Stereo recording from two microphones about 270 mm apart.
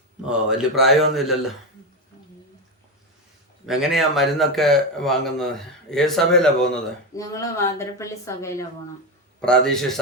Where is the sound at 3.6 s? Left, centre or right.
Centre.